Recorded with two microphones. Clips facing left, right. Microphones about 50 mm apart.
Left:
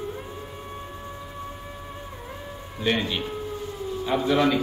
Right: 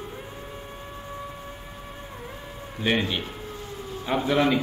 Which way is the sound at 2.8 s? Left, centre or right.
Right.